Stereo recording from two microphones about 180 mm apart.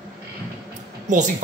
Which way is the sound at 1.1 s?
45° right (ahead or behind).